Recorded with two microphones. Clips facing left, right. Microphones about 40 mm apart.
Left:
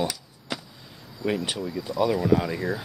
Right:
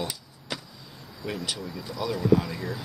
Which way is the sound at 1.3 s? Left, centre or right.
Left.